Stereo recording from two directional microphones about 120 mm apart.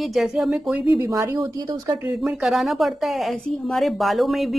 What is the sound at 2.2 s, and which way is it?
A woman's voice, 5° right (ahead or behind).